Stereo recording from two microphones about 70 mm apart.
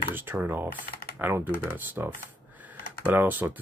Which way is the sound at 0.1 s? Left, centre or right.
Right.